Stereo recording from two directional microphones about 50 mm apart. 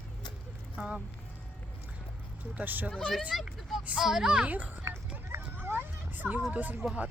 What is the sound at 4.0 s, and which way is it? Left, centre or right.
Speech, centre.